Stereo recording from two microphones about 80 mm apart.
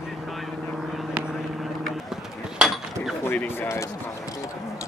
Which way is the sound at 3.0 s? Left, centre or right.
Centre.